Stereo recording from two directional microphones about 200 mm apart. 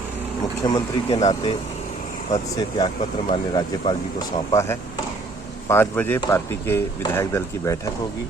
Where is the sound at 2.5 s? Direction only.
25° left (ahead or behind).